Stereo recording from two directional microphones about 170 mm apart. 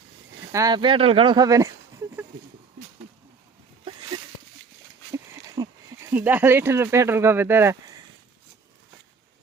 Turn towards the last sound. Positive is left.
turn(degrees=-15)  # may be behind; listen again after turning